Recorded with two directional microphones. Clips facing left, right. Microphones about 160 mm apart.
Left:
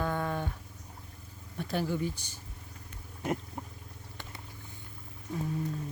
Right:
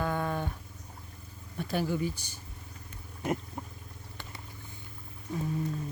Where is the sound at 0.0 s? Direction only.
5° right (ahead or behind).